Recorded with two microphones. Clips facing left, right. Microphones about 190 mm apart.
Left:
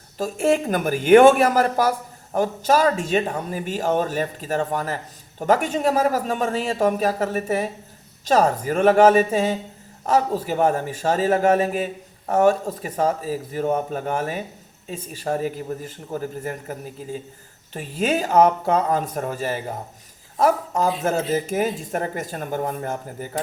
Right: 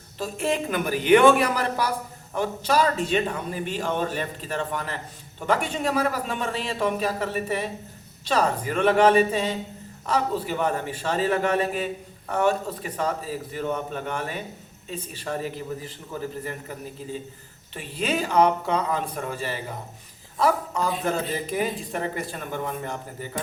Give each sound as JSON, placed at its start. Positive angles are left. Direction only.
{"t": 0.2, "sound": "a woman's voice", "side_deg": 45}